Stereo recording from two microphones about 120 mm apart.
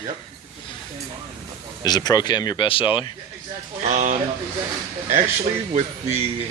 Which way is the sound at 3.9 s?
75° right (ahead or behind).